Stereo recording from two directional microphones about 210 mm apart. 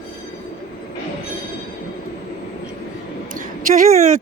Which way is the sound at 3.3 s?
40° right (ahead or behind).